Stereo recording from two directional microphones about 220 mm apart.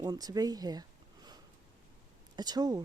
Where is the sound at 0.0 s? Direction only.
15° right (ahead or behind).